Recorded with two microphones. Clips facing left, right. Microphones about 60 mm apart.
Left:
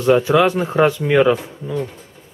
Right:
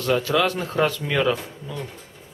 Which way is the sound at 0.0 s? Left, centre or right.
Left.